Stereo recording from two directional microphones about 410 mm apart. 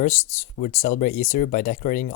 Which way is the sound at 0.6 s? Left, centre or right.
Centre.